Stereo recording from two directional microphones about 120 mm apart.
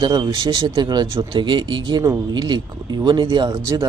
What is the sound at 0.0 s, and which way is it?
A man's voice, 35° right (ahead or behind).